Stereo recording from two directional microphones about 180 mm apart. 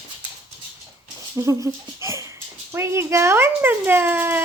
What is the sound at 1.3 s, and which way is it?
Speech, 15° right (ahead or behind).